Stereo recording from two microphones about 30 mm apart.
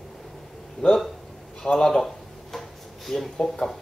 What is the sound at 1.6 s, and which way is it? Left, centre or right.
Speech, left.